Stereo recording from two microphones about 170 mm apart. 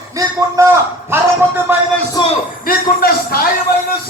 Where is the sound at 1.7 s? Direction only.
10° right (ahead or behind).